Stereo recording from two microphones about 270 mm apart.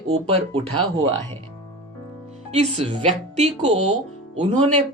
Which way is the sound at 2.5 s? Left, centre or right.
Right.